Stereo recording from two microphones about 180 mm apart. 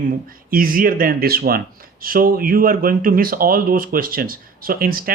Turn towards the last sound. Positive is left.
turn(degrees=-55)  # may be behind; listen again after turning